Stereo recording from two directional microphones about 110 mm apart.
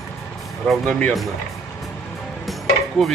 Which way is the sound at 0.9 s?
10° left (ahead or behind).